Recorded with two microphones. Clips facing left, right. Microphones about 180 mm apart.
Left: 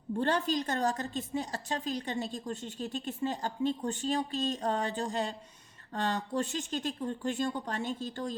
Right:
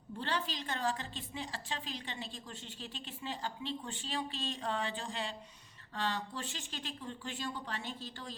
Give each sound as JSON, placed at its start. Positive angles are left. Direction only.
{"t": 0.2, "sound": "a woman's voice", "side_deg": 45}